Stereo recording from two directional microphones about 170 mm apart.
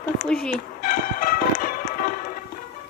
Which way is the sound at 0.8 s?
55° left (ahead or behind).